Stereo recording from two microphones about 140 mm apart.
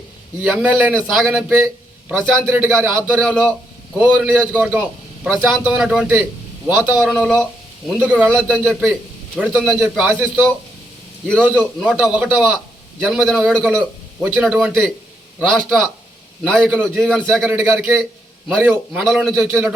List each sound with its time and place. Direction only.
0.3 s a man's voice: 10° right (ahead or behind)
7.0 s a man's voice: 5° right (ahead or behind)
11.4 s a man's voice: 10° right (ahead or behind)
19.3 s a man's voice: 15° right (ahead or behind)